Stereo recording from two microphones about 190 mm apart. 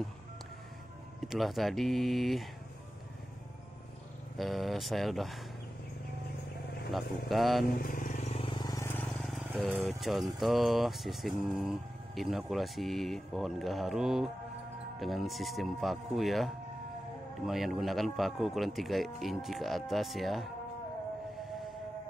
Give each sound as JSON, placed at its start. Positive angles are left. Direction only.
{"t": 1.2, "sound": "speech", "side_deg": 0}
{"t": 4.4, "sound": "speech", "side_deg": 0}
{"t": 6.9, "sound": "speech", "side_deg": 0}
{"t": 7.8, "sound": "vehicle", "side_deg": 45}
{"t": 8.9, "sound": "vehicle", "side_deg": 0}
{"t": 9.7, "sound": "speech", "side_deg": -5}